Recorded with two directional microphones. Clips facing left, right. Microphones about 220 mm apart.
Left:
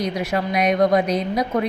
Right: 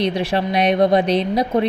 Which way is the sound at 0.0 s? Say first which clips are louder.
Right 3 dB; 30° right (ahead or behind).